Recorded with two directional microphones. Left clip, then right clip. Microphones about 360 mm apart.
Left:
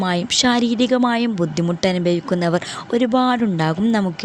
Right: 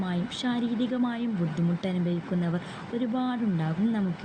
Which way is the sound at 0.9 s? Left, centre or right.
Left.